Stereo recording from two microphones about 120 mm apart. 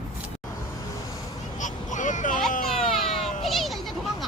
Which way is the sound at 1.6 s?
90° left.